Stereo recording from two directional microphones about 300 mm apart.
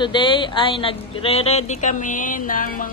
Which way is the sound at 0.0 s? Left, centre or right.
Centre.